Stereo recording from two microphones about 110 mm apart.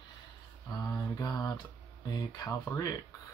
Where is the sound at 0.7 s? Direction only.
35° left (ahead or behind).